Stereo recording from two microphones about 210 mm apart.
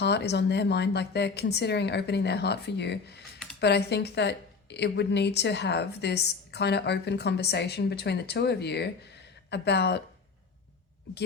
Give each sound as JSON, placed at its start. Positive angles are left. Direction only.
{"t": 0.0, "sound": "a woman's voice", "side_deg": 55}